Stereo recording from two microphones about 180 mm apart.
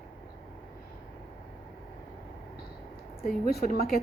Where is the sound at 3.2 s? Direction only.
60° left (ahead or behind).